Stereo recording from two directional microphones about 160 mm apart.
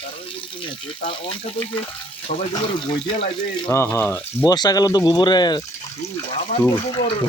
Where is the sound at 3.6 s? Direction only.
15° left (ahead or behind).